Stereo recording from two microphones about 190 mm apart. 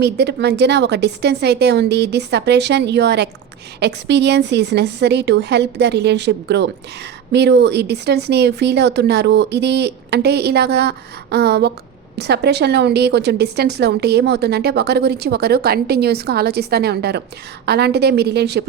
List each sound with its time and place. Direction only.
0.0 s a woman's voice: 60° right (ahead or behind)